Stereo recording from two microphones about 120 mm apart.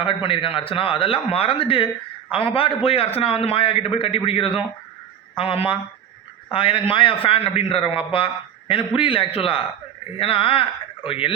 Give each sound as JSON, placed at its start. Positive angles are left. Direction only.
{"t": 0.0, "sound": "a man's voice", "side_deg": 45}